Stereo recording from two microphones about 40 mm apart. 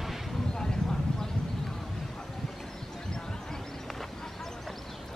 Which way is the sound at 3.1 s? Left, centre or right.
Centre.